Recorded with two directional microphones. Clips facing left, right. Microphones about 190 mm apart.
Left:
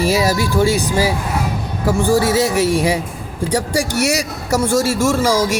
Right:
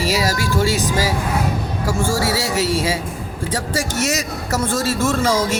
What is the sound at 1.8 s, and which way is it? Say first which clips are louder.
Speech: left 6 dB; 20° left (ahead or behind).